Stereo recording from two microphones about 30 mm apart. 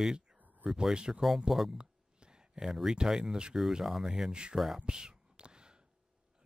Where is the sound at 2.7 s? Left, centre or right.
Centre.